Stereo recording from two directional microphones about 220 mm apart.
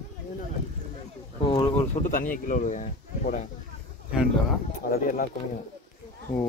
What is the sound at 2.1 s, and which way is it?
Speech, 40° left (ahead or behind).